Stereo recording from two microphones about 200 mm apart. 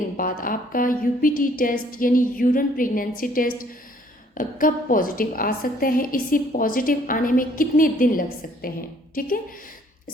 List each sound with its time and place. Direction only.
0.2 s a woman's voice: 45° left (ahead or behind)